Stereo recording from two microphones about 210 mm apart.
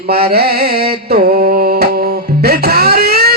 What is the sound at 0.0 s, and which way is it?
Music, 45° right (ahead or behind).